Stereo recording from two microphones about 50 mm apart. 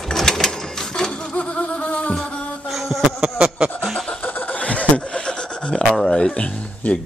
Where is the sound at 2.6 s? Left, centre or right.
Centre.